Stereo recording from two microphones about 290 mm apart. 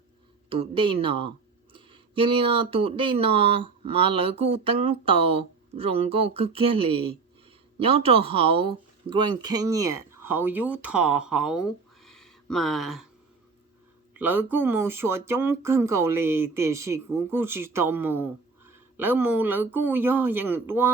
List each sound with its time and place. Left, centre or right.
0.5 s speech: centre
14.1 s speech: centre